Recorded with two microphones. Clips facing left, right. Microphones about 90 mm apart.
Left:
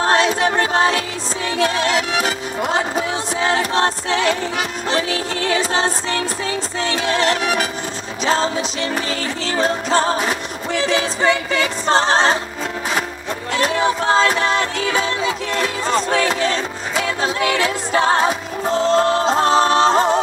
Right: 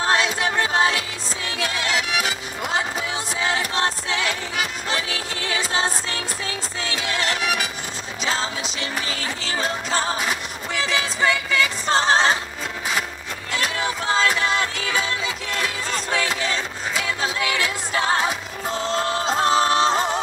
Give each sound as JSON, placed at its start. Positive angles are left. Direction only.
{"t": 0.0, "sound": "music", "side_deg": 30}
{"t": 13.6, "sound": "music", "side_deg": 30}